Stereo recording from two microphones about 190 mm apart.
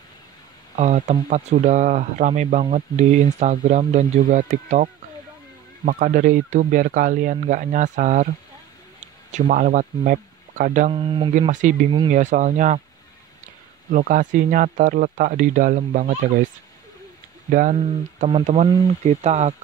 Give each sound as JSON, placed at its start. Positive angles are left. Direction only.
{"t": 0.7, "sound": "speech", "side_deg": -40}
{"t": 9.3, "sound": "speech", "side_deg": -45}
{"t": 10.9, "sound": "speech", "side_deg": -25}
{"t": 11.3, "sound": "speech", "side_deg": -40}
{"t": 13.8, "sound": "speech", "side_deg": -45}
{"t": 17.5, "sound": "speech", "side_deg": -45}